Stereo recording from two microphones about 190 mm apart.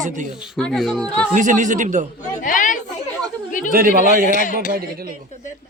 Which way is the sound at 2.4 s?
45° left (ahead or behind).